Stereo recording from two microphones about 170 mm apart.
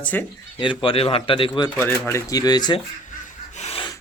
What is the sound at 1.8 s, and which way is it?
Speech, 15° left (ahead or behind).